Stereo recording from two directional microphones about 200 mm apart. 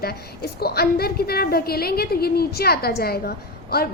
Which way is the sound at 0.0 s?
50° left (ahead or behind).